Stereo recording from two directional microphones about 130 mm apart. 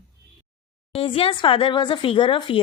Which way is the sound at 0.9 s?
45° left (ahead or behind).